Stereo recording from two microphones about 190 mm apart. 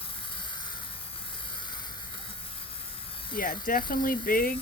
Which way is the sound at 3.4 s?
50° left (ahead or behind).